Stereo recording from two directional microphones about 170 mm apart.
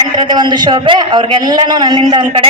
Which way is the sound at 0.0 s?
25° right (ahead or behind).